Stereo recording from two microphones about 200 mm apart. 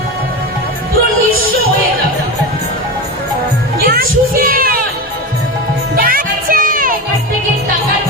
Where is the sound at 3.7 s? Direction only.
50° right (ahead or behind).